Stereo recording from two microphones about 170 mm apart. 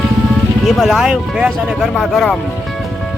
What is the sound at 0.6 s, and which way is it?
Speech, centre (ahead or behind).